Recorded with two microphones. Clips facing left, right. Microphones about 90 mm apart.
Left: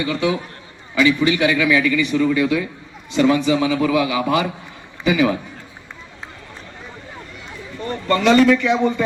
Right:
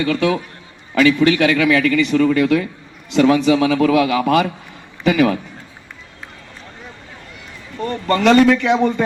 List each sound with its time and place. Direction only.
0.9 s a man's voice: 60° right (ahead or behind)
7.8 s a man's voice: 55° right (ahead or behind)